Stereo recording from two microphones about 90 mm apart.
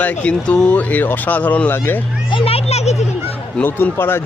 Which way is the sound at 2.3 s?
90° left.